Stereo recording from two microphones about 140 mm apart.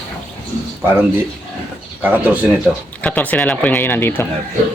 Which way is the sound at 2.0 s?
10° right (ahead or behind).